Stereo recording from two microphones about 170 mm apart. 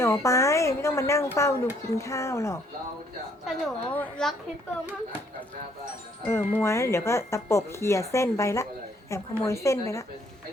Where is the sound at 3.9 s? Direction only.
10° left (ahead or behind).